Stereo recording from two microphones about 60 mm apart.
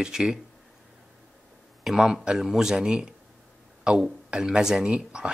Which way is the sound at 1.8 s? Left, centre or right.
Centre.